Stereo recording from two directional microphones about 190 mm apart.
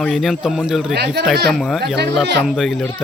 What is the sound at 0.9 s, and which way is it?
Speech, 60° right (ahead or behind).